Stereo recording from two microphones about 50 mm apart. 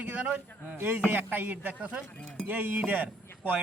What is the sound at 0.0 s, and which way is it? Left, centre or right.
Speech, right.